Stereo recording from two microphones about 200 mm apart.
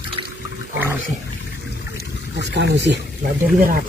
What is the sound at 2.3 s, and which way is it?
Speech, 60° right (ahead or behind).